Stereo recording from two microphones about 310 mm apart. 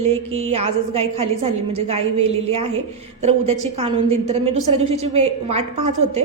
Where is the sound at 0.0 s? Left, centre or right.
Centre.